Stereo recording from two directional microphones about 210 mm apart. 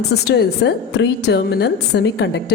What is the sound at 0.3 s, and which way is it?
A woman's voice, 50° left (ahead or behind).